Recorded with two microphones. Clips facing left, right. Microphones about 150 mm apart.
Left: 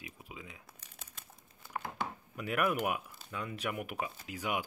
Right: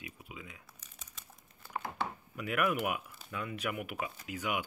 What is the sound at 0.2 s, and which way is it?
Speech, 35° left (ahead or behind).